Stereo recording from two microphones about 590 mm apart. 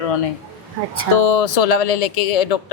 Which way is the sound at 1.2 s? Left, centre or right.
Left.